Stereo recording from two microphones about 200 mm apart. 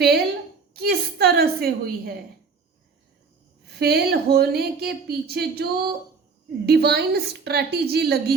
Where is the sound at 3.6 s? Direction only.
55° right (ahead or behind).